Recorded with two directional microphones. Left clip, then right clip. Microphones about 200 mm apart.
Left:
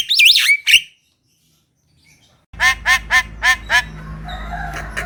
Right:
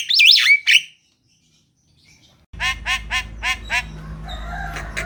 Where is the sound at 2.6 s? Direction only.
15° left (ahead or behind).